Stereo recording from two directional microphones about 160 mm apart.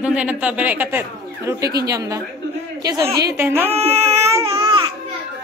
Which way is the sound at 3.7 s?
40° right (ahead or behind).